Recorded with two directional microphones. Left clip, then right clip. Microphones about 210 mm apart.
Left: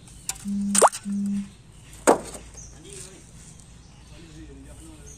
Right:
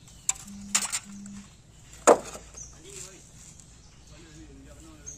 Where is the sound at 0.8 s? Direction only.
40° left (ahead or behind).